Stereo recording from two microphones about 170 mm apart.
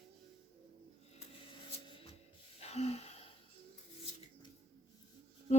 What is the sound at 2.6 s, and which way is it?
Gasp, 40° left (ahead or behind).